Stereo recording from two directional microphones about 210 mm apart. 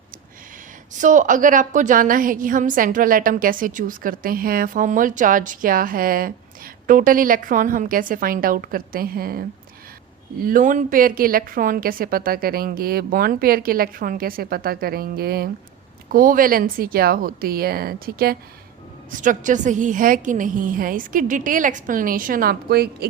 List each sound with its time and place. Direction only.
0.9 s a woman's voice: 35° right (ahead or behind)
10.4 s a woman's voice: 40° right (ahead or behind)